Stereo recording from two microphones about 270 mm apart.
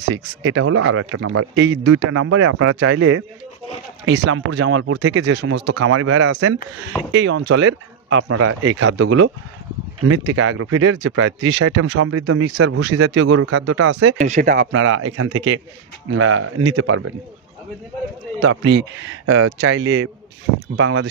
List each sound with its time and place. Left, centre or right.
0.1 s speech: right
1.9 s speech: right
7.1 s speech: right
8.9 s speech: right
13.6 s speech: right
14.1 s speech: right
14.7 s speech: right
18.4 s speech: right